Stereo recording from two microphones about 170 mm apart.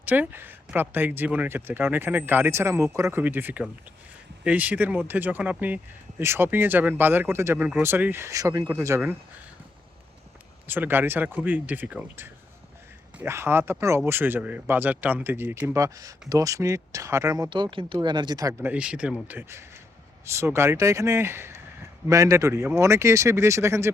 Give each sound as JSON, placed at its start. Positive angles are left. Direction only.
{"t": 0.0, "sound": "speech", "side_deg": -10}
{"t": 10.7, "sound": "speech", "side_deg": -10}
{"t": 18.7, "sound": "speech", "side_deg": -5}